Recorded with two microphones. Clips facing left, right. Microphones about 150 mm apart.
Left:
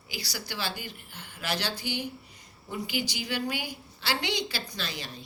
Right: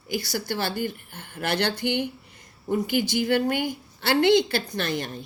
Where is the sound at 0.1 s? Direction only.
50° right (ahead or behind).